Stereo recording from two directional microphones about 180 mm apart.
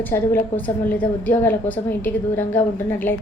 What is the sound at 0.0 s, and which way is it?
A woman's voice, 10° left (ahead or behind).